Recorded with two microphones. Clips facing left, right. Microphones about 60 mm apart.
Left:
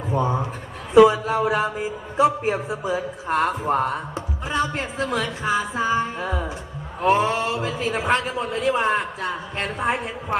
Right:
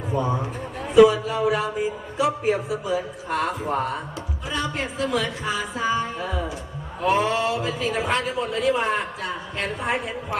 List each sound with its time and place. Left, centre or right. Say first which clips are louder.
0.1 s a man's voice: left 2 dB; left
1.0 s a sound: left 1 dB; left
2.1 s a man's voice: left 3 dB; left